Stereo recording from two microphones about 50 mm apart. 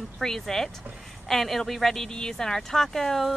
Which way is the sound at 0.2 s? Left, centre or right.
Centre.